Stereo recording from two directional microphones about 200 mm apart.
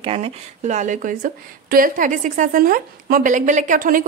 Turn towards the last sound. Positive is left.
turn(degrees=-45)  # may be behind; listen again after turning